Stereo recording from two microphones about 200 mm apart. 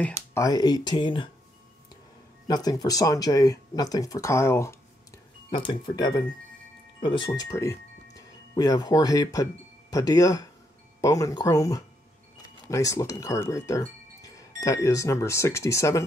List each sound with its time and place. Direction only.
0.0 s speech: 15° left (ahead or behind)
2.4 s speech: 20° left (ahead or behind)
5.5 s speech: 25° left (ahead or behind)